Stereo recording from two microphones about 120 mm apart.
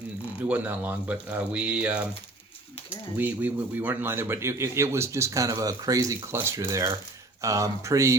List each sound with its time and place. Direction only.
0.4 s speech: 15° right (ahead or behind)